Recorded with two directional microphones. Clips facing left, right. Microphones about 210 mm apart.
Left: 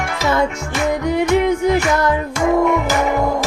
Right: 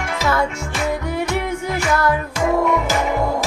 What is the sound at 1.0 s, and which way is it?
Music, 15° left (ahead or behind).